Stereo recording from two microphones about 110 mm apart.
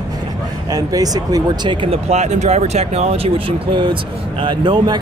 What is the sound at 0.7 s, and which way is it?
Speech, 35° right (ahead or behind).